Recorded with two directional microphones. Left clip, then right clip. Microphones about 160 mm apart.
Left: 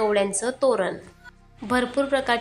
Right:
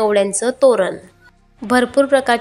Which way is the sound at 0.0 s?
30° right (ahead or behind).